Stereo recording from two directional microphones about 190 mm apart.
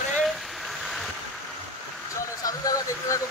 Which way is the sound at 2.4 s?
20° left (ahead or behind).